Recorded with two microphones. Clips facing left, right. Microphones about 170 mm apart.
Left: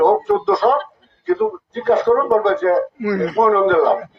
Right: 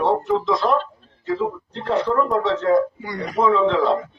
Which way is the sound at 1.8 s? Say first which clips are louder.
Left 6 dB; 55° left (ahead or behind).